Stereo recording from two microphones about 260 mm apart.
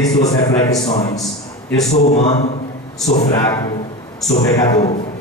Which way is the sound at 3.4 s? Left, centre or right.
Centre.